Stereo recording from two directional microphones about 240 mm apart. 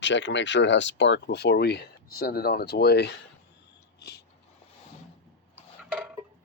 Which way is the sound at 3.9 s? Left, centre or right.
Left.